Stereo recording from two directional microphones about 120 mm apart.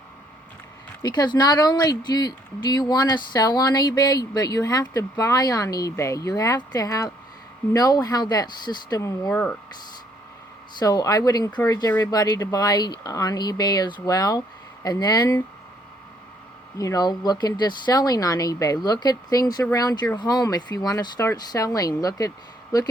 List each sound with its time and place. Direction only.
1.0 s speech: 35° left (ahead or behind)
10.8 s speech: 35° left (ahead or behind)
16.7 s speech: 30° left (ahead or behind)